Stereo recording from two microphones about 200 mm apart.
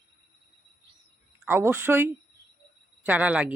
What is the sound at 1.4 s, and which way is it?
Speech, 10° right (ahead or behind).